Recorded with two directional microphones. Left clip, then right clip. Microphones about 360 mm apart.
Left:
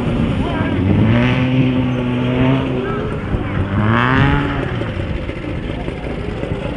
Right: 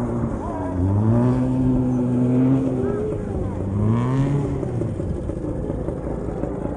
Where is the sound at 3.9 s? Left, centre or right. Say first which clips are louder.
Left 12 dB; right.